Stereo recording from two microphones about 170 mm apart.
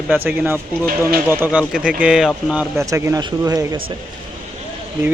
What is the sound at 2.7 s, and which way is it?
Speech, 15° right (ahead or behind).